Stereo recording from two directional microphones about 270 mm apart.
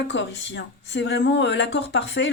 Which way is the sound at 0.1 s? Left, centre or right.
Left.